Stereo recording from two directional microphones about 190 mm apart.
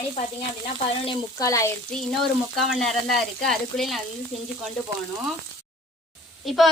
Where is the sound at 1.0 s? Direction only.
15° left (ahead or behind).